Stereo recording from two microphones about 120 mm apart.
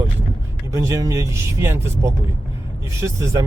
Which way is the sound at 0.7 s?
25° right (ahead or behind).